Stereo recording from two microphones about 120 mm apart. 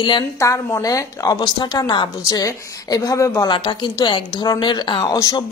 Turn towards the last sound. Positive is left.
turn(degrees=30)  # may be behind; listen again after turning